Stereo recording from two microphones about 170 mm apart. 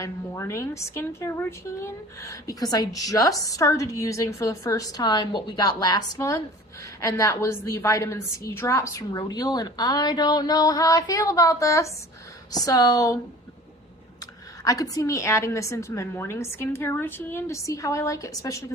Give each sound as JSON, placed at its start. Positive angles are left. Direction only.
{"t": 0.0, "sound": "a woman's voice", "side_deg": 15}
{"t": 14.6, "sound": "a woman's voice", "side_deg": 20}